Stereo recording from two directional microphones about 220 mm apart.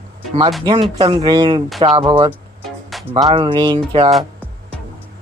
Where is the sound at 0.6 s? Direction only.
20° right (ahead or behind).